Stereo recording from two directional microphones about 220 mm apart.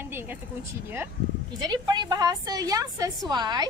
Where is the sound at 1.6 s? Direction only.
20° right (ahead or behind).